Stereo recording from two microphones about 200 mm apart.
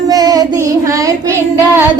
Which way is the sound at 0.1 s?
20° right (ahead or behind).